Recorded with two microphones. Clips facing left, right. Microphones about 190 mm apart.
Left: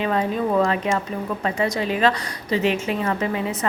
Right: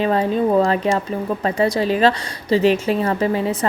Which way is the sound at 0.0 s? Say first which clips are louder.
Right 4 dB; 35° right (ahead or behind).